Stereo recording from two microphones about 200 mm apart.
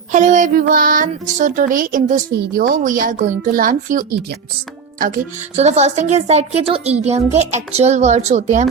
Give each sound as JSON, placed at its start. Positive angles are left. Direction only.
{"t": 0.1, "sound": "child singing", "side_deg": -40}
{"t": 0.7, "sound": "speech", "side_deg": -45}